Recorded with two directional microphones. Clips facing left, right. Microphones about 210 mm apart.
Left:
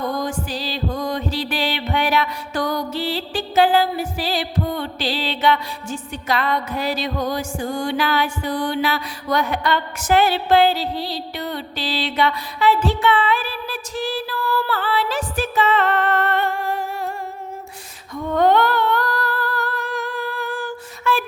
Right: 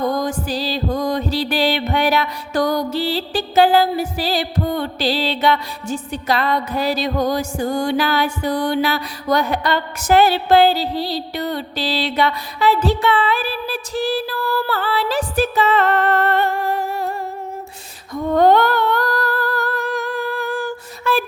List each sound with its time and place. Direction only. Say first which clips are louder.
0.0 s music: right 4 dB; 40° right (ahead or behind)
18.1 s humming: right 3 dB; 35° right (ahead or behind)